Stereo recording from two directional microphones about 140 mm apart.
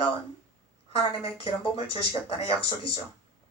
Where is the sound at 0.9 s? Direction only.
40° left (ahead or behind).